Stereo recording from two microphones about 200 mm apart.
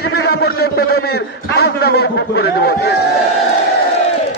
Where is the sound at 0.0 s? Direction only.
50° left (ahead or behind).